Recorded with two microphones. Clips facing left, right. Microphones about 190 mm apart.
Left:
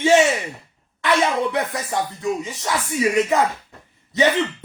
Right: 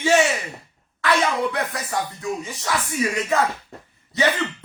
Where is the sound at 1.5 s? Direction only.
20° left (ahead or behind).